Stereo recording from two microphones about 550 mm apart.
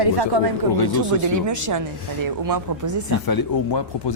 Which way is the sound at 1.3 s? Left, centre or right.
Right.